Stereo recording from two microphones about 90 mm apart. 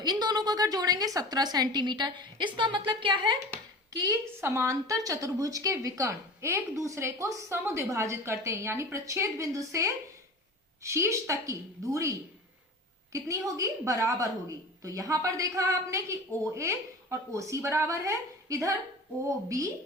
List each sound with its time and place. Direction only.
0.0 s a woman's voice: 50° right (ahead or behind)
4.4 s a woman's voice: 25° right (ahead or behind)